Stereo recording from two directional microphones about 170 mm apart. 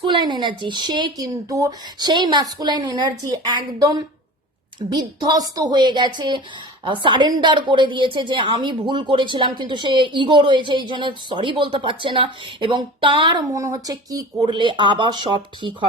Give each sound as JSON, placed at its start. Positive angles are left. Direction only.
{"t": 0.0, "sound": "a woman's voice", "side_deg": -25}